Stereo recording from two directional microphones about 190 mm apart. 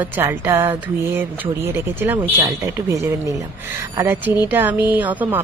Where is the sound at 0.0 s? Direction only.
10° right (ahead or behind).